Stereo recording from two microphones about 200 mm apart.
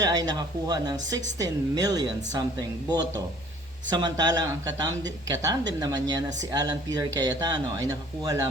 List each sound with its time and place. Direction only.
0.0 s a woman's voice: 20° right (ahead or behind)